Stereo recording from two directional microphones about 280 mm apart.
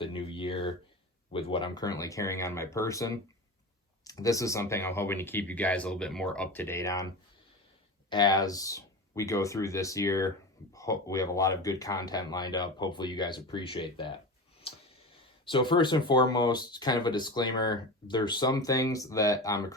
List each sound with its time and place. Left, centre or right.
0.0 s speech: centre
8.1 s speech: centre
14.7 s clicking: centre
15.4 s speech: centre